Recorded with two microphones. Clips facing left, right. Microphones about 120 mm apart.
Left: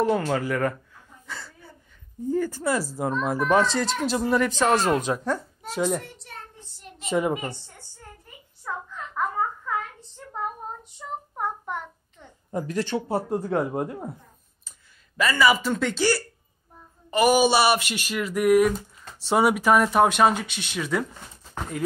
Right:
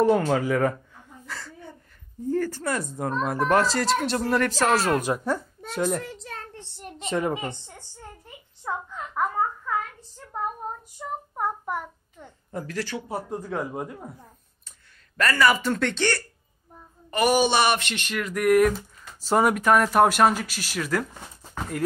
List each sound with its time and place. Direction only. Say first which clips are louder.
0.1 s speech: right 3 dB; centre (ahead or behind)
1.2 s a sound: right 1 dB; centre (ahead or behind)
2.2 s speech: left 1 dB; centre (ahead or behind)
6.0 s a sound: right 5 dB; 85° right
7.1 s speech: left 2 dB; 5° left (ahead or behind)
7.3 s speech: even; 20° right (ahead or behind)
8.6 s a sound: right 2 dB; 15° right (ahead or behind)
9.9 s child singing: right 1 dB; centre (ahead or behind)
12.4 s speech: left 4 dB; 20° left (ahead or behind)
15.1 s speech: even; centre (ahead or behind)